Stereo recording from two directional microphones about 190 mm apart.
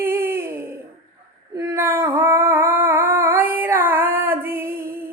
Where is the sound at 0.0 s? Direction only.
10° right (ahead or behind).